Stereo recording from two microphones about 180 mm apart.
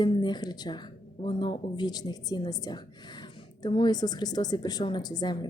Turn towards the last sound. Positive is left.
turn(degrees=20)  # may be behind; listen again after turning